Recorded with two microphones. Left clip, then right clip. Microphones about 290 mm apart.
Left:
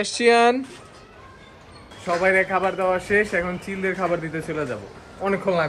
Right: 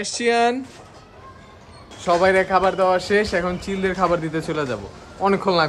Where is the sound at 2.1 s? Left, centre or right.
Centre.